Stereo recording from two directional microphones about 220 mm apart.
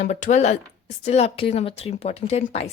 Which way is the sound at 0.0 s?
30° left (ahead or behind).